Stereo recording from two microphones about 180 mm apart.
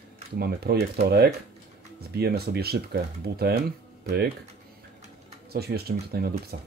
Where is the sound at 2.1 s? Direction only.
60° right (ahead or behind).